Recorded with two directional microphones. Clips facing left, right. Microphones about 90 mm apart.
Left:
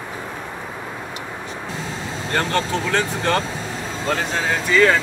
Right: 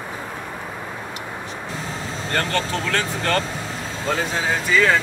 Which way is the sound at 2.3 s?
15° left (ahead or behind).